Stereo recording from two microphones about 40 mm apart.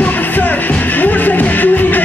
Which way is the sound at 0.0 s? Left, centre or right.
Left.